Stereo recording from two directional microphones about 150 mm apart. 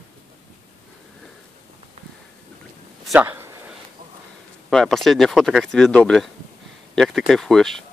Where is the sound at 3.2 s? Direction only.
15° right (ahead or behind).